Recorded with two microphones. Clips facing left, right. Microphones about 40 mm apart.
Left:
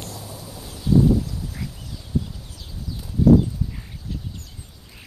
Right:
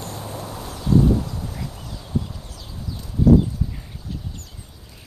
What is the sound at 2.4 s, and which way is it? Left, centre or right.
Clip-clop, centre.